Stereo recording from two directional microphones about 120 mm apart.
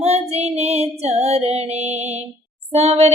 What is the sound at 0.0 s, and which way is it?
Female singing, 60° right (ahead or behind).